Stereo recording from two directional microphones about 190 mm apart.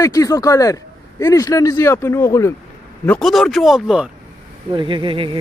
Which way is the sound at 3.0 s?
5° left (ahead or behind).